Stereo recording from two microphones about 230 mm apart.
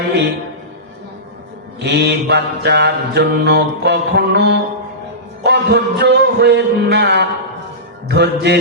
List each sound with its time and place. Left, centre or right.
1.8 s mantra: right